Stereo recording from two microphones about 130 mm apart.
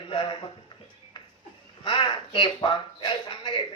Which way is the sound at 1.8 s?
40° left (ahead or behind).